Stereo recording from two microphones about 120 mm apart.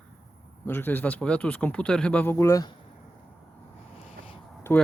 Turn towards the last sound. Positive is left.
turn(degrees=20)  # may be behind; listen again after turning